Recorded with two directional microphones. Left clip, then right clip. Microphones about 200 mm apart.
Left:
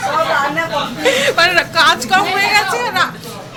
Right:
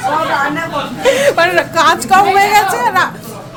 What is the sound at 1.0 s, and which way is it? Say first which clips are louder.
A woman's voice: right 2 dB; 15° right (ahead or behind).